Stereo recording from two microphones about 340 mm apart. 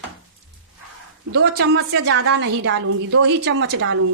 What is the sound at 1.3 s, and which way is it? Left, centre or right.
A woman's voice, right.